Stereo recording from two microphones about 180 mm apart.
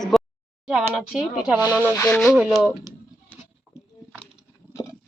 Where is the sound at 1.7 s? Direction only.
10° left (ahead or behind).